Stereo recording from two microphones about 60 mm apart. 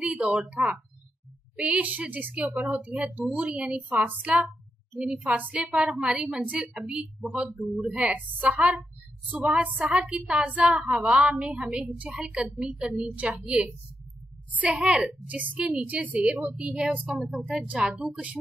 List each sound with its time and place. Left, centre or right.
0.0 s a woman's voice: centre
14.8 s a woman's voice: centre